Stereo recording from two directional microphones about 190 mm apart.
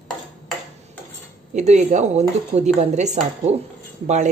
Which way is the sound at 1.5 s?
40° right (ahead or behind).